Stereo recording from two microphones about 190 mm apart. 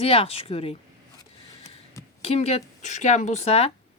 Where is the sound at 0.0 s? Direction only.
30° left (ahead or behind).